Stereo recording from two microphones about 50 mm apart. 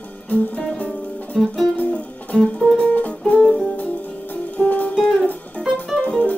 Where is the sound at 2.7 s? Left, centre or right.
Left.